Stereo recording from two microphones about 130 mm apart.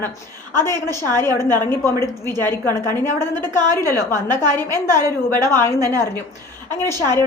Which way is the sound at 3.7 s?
20° left (ahead or behind).